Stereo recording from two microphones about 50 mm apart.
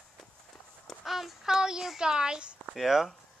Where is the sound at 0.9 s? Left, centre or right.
Centre.